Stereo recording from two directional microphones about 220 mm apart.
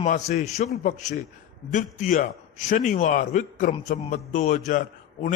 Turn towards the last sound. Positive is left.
turn(degrees=35)  # may be behind; listen again after turning